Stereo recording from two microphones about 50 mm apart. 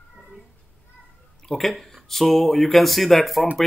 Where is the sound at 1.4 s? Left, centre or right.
Centre.